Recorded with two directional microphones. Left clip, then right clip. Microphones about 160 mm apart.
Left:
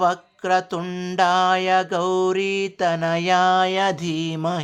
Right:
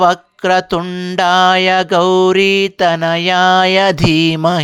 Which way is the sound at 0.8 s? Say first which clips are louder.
Right 7 dB; 15° right (ahead or behind).